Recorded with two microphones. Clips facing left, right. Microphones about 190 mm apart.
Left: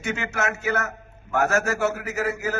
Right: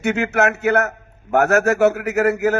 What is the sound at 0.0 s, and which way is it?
A man's voice, 65° right (ahead or behind).